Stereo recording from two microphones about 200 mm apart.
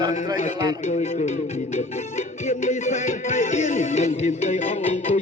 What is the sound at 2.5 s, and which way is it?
Music, 35° left (ahead or behind).